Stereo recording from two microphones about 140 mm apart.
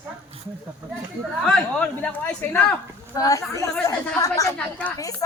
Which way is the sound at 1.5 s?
10° left (ahead or behind).